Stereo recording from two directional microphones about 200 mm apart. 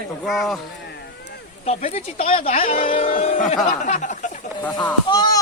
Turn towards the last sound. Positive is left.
turn(degrees=20)  # may be behind; listen again after turning